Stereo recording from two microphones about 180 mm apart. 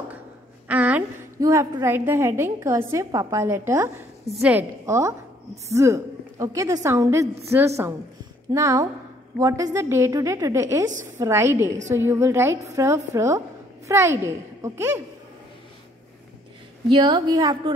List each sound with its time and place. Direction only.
0.7 s a woman's voice: 10° right (ahead or behind)
16.9 s a woman's voice: 25° right (ahead or behind)